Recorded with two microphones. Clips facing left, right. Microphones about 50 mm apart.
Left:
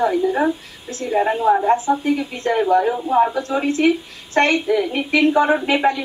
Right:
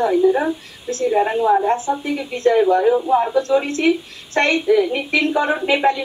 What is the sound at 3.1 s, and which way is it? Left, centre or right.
Speech, centre.